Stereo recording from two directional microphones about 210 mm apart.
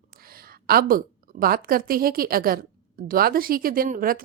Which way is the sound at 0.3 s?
45° right (ahead or behind).